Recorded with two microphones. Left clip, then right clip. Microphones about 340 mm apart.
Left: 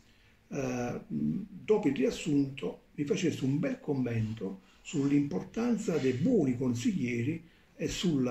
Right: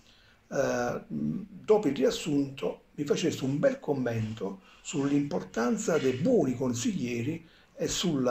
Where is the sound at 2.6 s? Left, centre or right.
Right.